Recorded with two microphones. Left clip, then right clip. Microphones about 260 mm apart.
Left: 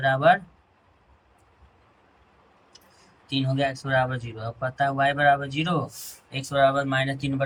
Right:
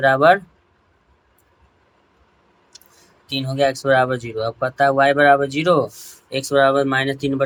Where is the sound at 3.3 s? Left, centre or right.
Right.